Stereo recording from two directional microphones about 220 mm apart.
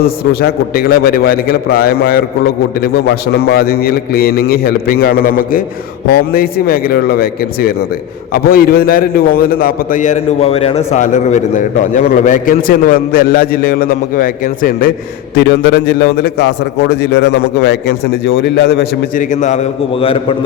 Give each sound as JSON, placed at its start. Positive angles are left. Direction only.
{"t": 0.0, "sound": "a man's voice", "side_deg": 40}